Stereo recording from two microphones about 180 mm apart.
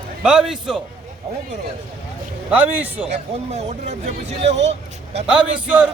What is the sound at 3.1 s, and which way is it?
Speech, 40° right (ahead or behind).